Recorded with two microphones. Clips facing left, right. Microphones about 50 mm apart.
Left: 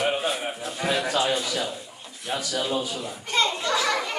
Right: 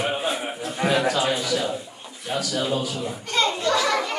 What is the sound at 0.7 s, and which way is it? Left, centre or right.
Speech, centre.